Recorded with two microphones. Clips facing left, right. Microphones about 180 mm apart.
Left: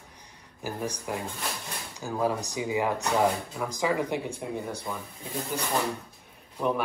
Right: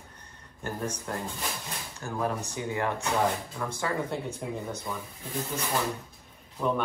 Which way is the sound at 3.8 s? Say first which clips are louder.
Left 4 dB; 15° left (ahead or behind).